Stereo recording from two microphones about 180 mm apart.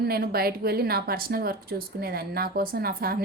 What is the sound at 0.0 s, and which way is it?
A woman's voice, 60° right (ahead or behind).